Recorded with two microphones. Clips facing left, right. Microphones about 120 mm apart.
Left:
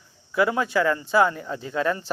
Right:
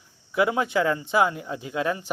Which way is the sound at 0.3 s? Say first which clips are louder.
Left 1 dB; 20° right (ahead or behind).